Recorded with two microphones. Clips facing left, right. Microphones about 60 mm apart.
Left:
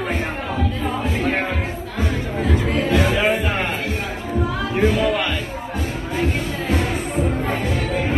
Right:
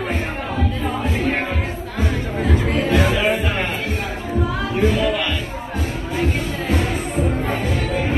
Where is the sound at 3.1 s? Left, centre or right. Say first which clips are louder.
Even; left.